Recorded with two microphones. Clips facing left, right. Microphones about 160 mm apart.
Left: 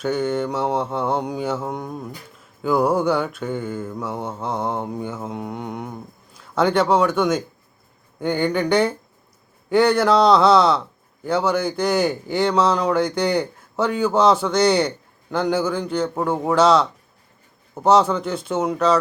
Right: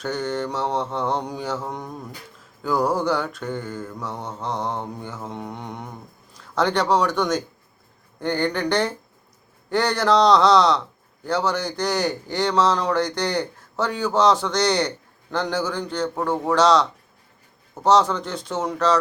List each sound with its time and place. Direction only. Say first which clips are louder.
0.0 s mantra: left 4 dB; 5° left (ahead or behind)
2.6 s a man's voice: left 3 dB; 5° left (ahead or behind)
8.2 s mantra: left 2 dB; 5° left (ahead or behind)
9.6 s a man's voice: left 4 dB; 5° left (ahead or behind)
16.1 s mantra: left 1 dB; 10° left (ahead or behind)
17.7 s a man's voice: left 2 dB; 10° left (ahead or behind)
18.4 s mantra: left 2 dB; 5° left (ahead or behind)